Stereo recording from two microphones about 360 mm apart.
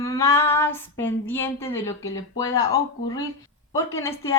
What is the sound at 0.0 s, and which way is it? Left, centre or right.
Speech, centre.